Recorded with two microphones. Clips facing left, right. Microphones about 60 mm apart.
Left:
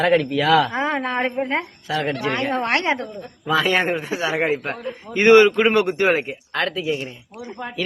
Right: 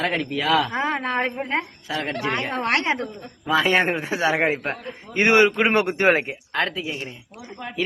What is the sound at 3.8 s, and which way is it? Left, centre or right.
Speech, right.